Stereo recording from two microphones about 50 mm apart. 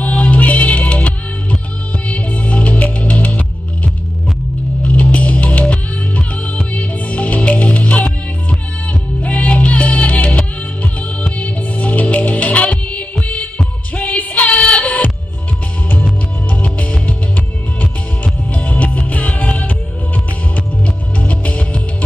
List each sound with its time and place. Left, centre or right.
0.0 s music: left